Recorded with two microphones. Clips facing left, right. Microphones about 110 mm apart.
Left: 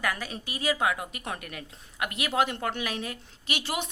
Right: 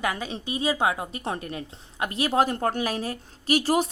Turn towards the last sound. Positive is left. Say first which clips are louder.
# right 10 dB
turn(degrees=-40)  # may be behind; listen again after turning